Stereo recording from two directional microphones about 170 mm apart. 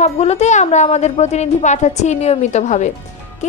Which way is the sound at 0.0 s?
40° left (ahead or behind).